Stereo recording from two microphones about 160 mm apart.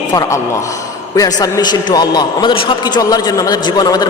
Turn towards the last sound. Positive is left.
turn(degrees=25)  # may be behind; listen again after turning